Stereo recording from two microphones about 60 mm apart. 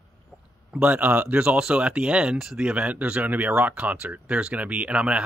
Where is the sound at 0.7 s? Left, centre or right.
Right.